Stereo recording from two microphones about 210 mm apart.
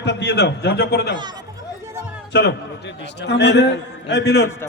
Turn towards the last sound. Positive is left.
turn(degrees=55)  # may be behind; listen again after turning